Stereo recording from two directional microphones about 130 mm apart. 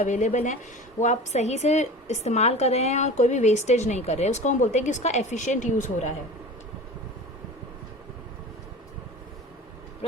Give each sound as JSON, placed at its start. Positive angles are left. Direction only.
{"t": 0.0, "sound": "a woman's voice", "side_deg": 70}